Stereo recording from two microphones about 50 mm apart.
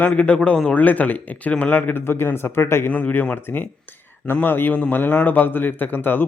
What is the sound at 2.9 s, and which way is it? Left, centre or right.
Speech, left.